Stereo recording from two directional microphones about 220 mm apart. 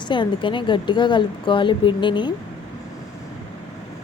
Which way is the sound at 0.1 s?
20° left (ahead or behind).